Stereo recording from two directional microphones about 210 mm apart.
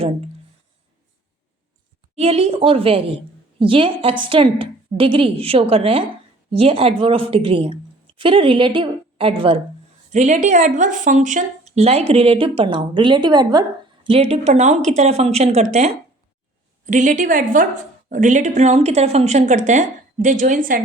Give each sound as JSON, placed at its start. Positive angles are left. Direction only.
{"t": 2.1, "sound": "a woman's voice", "side_deg": -30}